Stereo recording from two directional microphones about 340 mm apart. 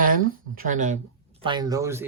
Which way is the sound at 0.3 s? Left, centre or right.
Right.